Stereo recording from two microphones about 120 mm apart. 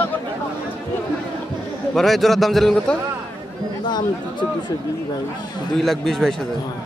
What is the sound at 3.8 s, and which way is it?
Speech, 35° left (ahead or behind).